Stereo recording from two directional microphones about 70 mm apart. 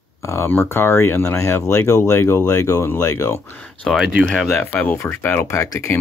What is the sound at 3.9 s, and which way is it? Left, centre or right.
Speech, centre.